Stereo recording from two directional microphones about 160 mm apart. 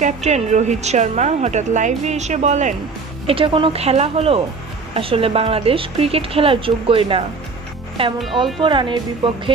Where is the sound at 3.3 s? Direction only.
35° right (ahead or behind).